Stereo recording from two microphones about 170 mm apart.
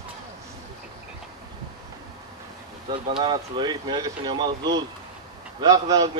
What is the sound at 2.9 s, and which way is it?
Speech, 30° right (ahead or behind).